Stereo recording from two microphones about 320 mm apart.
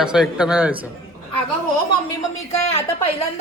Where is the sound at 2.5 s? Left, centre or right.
Centre.